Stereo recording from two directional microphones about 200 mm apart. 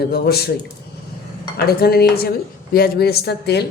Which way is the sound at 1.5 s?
50° left (ahead or behind).